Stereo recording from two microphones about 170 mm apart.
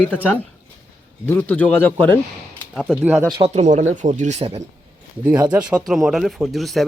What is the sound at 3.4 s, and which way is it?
Speech, 40° right (ahead or behind).